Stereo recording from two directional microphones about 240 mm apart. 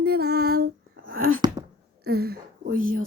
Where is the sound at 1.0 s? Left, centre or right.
Right.